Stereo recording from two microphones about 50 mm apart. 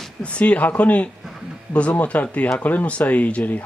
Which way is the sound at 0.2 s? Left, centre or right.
Left.